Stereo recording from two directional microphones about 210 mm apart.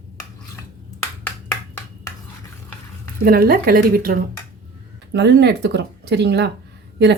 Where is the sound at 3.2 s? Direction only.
45° right (ahead or behind).